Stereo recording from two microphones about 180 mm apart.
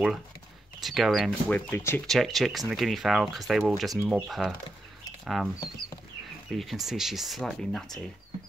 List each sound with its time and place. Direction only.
0.7 s speech: centre (ahead or behind)
1.7 s speech: 10° left (ahead or behind)
2.0 s speech: centre (ahead or behind)
6.5 s speech: centre (ahead or behind)